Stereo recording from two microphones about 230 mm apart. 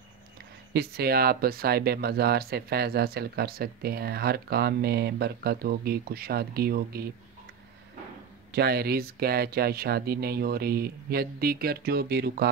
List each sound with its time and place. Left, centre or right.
0.7 s speech: right
8.5 s speech: right